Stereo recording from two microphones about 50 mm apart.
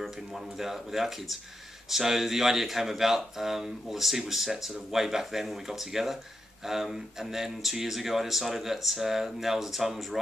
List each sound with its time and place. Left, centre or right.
0.0 s speech: centre